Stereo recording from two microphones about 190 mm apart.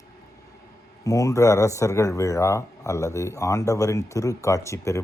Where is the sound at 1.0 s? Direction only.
15° left (ahead or behind).